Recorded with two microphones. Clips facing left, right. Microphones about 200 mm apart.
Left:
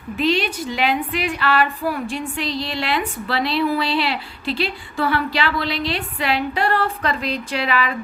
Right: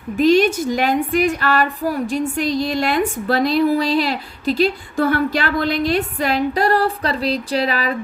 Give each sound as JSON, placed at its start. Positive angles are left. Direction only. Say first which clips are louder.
{"t": 0.2, "sound": "a woman's voice", "louder": "right 7 dB", "side_deg": -45}